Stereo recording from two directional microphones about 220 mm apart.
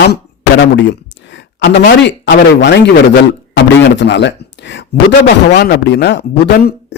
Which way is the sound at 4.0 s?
55° left (ahead or behind).